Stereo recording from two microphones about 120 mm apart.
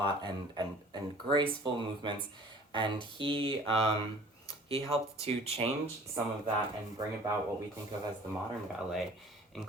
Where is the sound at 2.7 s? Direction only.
45° right (ahead or behind).